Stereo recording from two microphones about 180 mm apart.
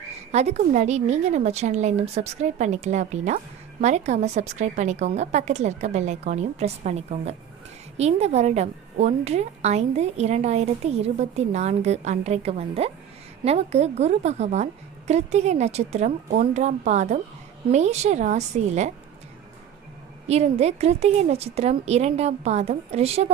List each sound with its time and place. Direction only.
0.3 s a woman's voice: 35° right (ahead or behind)
20.2 s a woman's voice: 35° right (ahead or behind)